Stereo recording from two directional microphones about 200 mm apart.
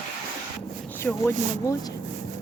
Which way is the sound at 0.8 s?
10° left (ahead or behind).